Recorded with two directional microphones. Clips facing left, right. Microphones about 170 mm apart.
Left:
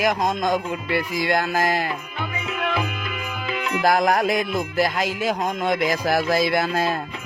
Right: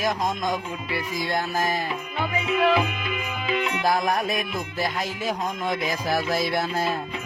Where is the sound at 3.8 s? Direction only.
90° left.